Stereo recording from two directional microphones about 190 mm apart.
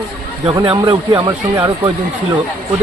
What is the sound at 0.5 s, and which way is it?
Speech, 20° right (ahead or behind).